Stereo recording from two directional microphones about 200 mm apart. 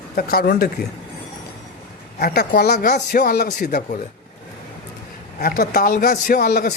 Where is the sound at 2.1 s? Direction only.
50° left (ahead or behind).